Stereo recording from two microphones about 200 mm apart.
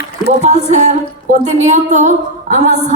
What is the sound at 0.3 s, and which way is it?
A woman's voice, 35° right (ahead or behind).